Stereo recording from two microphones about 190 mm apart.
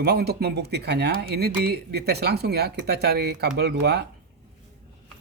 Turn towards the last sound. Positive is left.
turn(degrees=-60)  # may be behind; listen again after turning